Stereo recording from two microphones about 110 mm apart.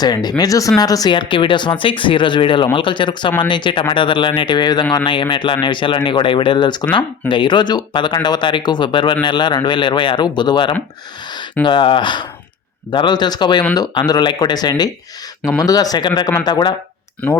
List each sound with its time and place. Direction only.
0.0 s speech: 40° left (ahead or behind)
1.1 s speech: 50° left (ahead or behind)